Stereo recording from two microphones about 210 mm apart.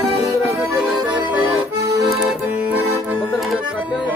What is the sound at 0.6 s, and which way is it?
Accordion, centre (ahead or behind).